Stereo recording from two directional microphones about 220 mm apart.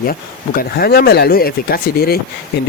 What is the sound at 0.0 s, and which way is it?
Speech, 40° left (ahead or behind).